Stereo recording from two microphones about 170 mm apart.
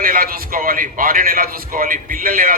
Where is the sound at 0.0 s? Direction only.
55° right (ahead or behind).